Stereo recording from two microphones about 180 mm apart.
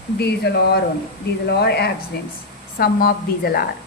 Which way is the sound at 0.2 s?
65° left (ahead or behind).